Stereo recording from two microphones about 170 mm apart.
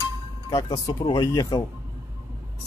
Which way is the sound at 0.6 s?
30° left (ahead or behind).